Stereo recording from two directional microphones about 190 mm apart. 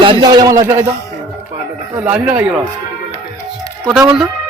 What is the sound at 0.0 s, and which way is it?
Speech, 25° right (ahead or behind).